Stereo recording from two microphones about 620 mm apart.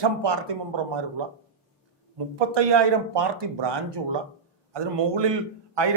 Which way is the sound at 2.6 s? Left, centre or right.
Right.